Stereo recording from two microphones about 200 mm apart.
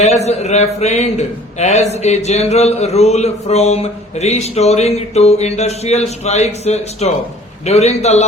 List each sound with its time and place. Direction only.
0.0 s a man's voice: 35° left (ahead or behind)